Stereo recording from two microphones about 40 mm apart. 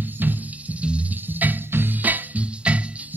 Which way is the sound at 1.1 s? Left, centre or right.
Right.